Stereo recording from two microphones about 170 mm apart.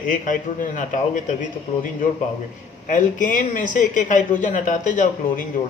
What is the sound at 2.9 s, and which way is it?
Speech, 50° left (ahead or behind).